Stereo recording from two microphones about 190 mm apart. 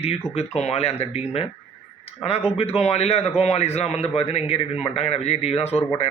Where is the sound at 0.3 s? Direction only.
35° left (ahead or behind).